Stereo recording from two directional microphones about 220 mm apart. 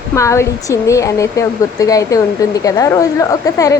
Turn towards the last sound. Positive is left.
turn(degrees=15)  # may be behind; listen again after turning